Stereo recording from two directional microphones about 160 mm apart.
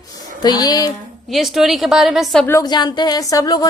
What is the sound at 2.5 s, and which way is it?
Speech, 25° left (ahead or behind).